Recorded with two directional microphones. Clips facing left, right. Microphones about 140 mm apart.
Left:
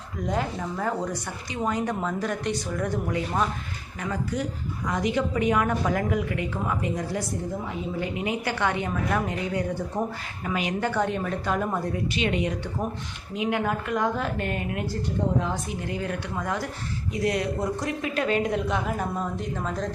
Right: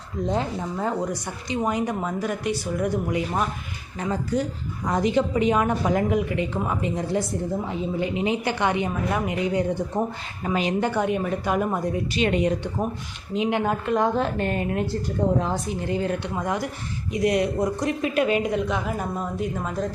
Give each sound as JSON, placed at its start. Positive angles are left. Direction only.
{"t": 0.3, "sound": "a woman's voice", "side_deg": -20}
{"t": 4.0, "sound": "a woman's voice", "side_deg": -30}
{"t": 10.4, "sound": "a woman's voice", "side_deg": -30}
{"t": 10.8, "sound": "speech", "side_deg": -15}
{"t": 12.1, "sound": "speech", "side_deg": -40}
{"t": 13.3, "sound": "a woman's voice", "side_deg": -25}
{"t": 15.9, "sound": "a woman's voice", "side_deg": -25}
{"t": 16.3, "sound": "speech", "side_deg": -15}